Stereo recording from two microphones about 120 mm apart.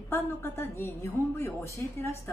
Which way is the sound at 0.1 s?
20° left (ahead or behind).